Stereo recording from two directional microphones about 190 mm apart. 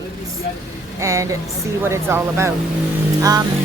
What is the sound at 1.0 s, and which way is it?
Speech, 15° right (ahead or behind).